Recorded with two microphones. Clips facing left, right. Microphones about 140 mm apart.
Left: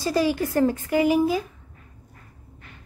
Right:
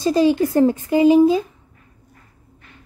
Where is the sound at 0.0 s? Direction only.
20° right (ahead or behind).